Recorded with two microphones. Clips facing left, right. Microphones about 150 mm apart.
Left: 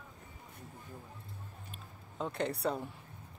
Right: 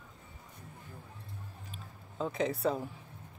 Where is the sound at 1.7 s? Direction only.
Centre (ahead or behind).